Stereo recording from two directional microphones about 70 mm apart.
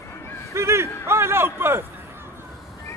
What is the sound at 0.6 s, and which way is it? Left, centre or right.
A man's voice, right.